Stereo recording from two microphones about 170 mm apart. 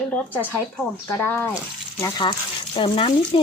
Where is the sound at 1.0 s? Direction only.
15° left (ahead or behind).